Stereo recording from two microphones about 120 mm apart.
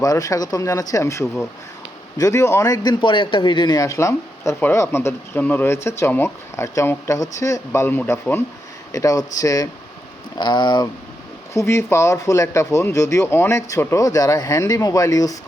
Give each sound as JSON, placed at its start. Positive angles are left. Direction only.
{"t": 0.0, "sound": "speech", "side_deg": 30}
{"t": 11.5, "sound": "speech", "side_deg": 20}